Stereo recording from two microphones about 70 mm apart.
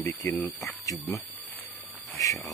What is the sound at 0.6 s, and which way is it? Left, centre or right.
Speech, left.